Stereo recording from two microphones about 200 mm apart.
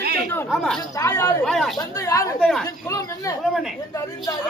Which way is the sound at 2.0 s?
15° left (ahead or behind).